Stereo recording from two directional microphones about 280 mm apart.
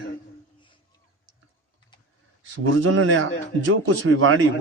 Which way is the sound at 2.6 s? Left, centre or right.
Right.